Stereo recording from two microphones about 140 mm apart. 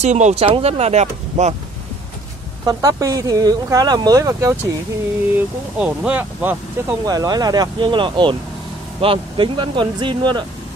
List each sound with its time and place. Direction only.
0.0 s speech: 55° right (ahead or behind)
2.6 s speech: 25° right (ahead or behind)
5.3 s speech: 10° right (ahead or behind)
7.1 s speech: 25° right (ahead or behind)